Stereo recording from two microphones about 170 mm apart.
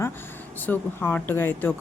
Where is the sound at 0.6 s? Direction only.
10° left (ahead or behind).